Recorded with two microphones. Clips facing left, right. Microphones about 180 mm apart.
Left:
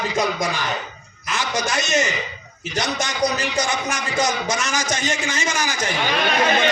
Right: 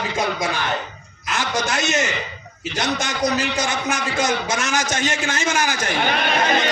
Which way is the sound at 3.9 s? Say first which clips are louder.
Right 1 dB; 60° right (ahead or behind).